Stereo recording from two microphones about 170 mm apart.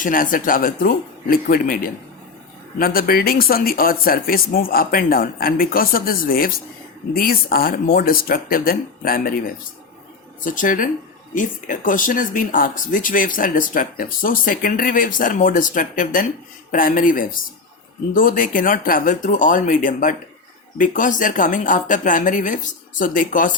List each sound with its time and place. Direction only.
0.0 s speech: 55° left (ahead or behind)
10.4 s speech: 50° left (ahead or behind)